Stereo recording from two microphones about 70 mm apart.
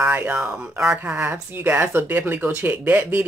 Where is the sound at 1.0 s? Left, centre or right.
Centre.